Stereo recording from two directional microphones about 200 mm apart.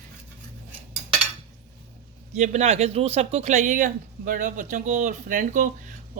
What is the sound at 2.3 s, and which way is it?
Speech, 35° right (ahead or behind).